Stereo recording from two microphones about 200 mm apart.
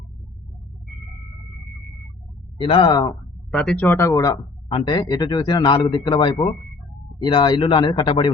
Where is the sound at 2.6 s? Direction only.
25° left (ahead or behind).